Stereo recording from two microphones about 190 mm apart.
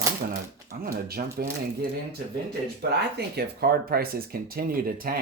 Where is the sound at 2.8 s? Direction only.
60° right (ahead or behind).